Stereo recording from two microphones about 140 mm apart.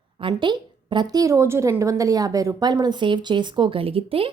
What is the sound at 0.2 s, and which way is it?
A woman's voice, 35° right (ahead or behind).